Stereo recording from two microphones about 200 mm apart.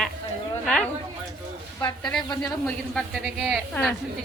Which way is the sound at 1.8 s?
20° left (ahead or behind).